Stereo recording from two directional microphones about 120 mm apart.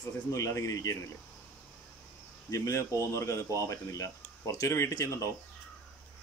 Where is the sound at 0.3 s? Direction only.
25° left (ahead or behind).